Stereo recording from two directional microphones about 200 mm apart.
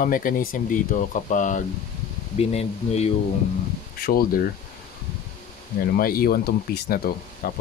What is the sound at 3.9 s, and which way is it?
Speech, 50° left (ahead or behind).